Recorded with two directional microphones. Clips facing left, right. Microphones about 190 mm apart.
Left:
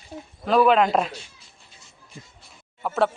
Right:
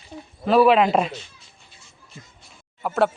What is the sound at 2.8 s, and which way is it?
Speech, 5° right (ahead or behind).